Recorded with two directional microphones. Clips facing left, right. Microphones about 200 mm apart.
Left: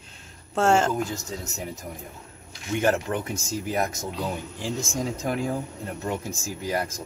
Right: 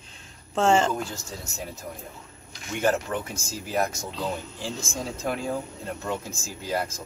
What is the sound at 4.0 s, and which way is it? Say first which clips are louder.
Speech: left 1 dB; 15° left (ahead or behind).